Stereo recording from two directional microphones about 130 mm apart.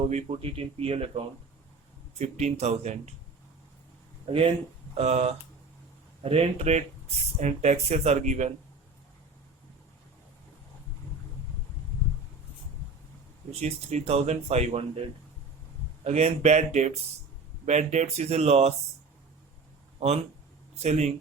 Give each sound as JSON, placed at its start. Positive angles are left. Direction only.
{"t": 0.0, "sound": "speech", "side_deg": -55}
{"t": 2.1, "sound": "speech", "side_deg": -60}
{"t": 4.3, "sound": "speech", "side_deg": -45}
{"t": 13.5, "sound": "speech", "side_deg": -55}
{"t": 16.0, "sound": "speech", "side_deg": -55}
{"t": 20.7, "sound": "speech", "side_deg": -60}